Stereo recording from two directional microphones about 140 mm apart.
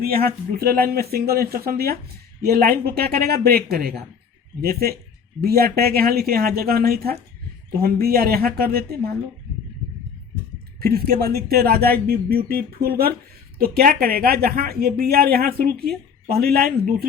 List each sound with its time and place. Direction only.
0.0 s speech: 90° right
10.8 s speech: 90° right